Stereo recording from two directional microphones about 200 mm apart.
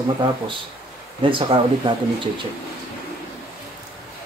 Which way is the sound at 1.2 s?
25° right (ahead or behind).